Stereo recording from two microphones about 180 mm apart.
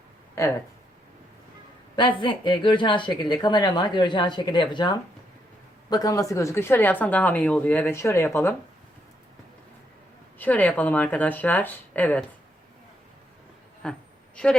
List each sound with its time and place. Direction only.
0.4 s a woman's voice: 15° left (ahead or behind)
2.0 s a woman's voice: 25° left (ahead or behind)
10.3 s a woman's voice: 10° left (ahead or behind)
13.8 s a woman's voice: 5° left (ahead or behind)